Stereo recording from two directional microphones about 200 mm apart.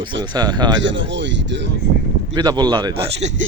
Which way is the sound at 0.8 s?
65° right (ahead or behind).